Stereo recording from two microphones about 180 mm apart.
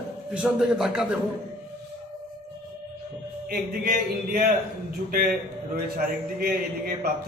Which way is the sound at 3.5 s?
55° right (ahead or behind).